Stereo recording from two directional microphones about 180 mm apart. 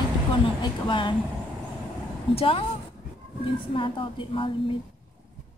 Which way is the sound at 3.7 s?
30° left (ahead or behind).